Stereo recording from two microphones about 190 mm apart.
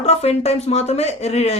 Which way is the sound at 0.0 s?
35° left (ahead or behind).